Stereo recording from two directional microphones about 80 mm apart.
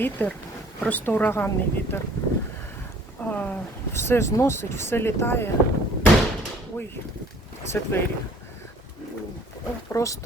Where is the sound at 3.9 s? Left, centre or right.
Left.